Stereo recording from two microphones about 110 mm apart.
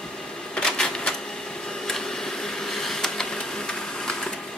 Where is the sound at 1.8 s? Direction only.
5° left (ahead or behind).